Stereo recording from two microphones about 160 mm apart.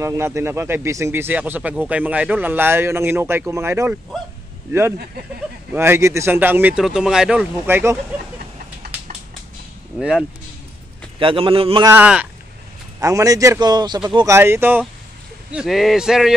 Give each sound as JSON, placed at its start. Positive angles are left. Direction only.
{"t": 0.0, "sound": "speech", "side_deg": -15}
{"t": 4.9, "sound": "speech", "side_deg": -75}
{"t": 5.7, "sound": "speech", "side_deg": -15}
{"t": 9.9, "sound": "speech", "side_deg": -5}
{"t": 11.1, "sound": "a man's voice", "side_deg": -35}
{"t": 11.8, "sound": "speech", "side_deg": -10}
{"t": 13.0, "sound": "a man's voice", "side_deg": -20}
{"t": 15.5, "sound": "speech", "side_deg": 0}